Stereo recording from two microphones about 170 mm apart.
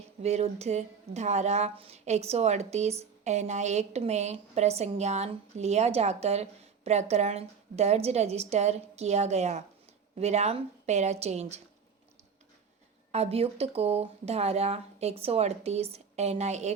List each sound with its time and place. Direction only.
0.2 s a woman's voice: 40° right (ahead or behind)
13.1 s a woman's voice: 35° right (ahead or behind)